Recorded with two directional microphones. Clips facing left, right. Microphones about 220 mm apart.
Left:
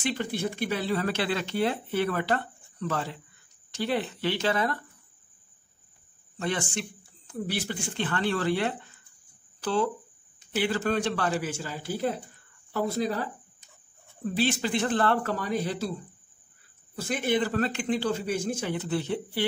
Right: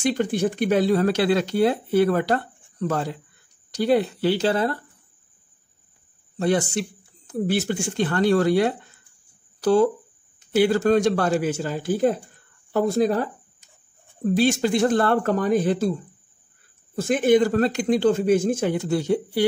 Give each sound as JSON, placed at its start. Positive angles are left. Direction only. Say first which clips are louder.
{"t": 0.0, "sound": "speech", "louder": "right 8 dB", "side_deg": -45}
{"t": 6.3, "sound": "a man's voice", "louder": "right 9 dB", "side_deg": -35}
{"t": 17.0, "sound": "a man's voice", "louder": "right 9 dB", "side_deg": -50}